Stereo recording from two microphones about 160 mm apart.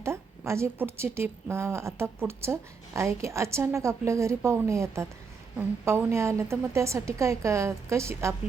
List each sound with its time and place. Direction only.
0.0 s a woman's voice: 15° right (ahead or behind)